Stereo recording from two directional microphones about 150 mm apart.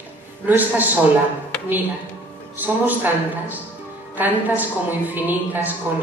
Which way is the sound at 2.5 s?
10° right (ahead or behind).